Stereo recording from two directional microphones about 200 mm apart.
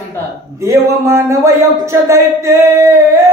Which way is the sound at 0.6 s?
15° right (ahead or behind).